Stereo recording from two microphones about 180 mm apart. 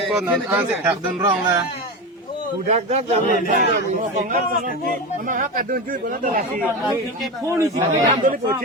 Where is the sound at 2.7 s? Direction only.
35° right (ahead or behind).